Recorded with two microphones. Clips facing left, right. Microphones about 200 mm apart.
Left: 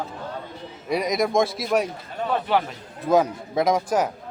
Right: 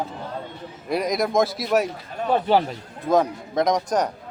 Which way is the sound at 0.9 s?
Centre (ahead or behind).